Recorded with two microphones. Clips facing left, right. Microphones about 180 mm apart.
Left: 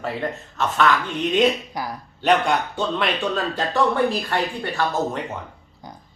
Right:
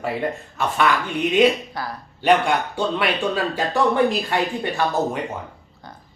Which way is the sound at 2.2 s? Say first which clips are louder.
Right 1 dB; 10° right (ahead or behind).